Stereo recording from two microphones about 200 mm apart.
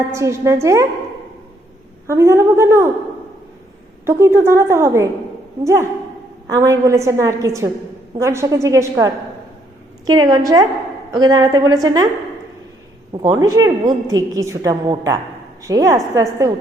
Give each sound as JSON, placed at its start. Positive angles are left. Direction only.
{"t": 0.1, "sound": "a woman's voice", "side_deg": -15}
{"t": 2.0, "sound": "a woman's voice", "side_deg": -15}
{"t": 4.0, "sound": "a woman's voice", "side_deg": -15}
{"t": 13.2, "sound": "a woman's voice", "side_deg": -15}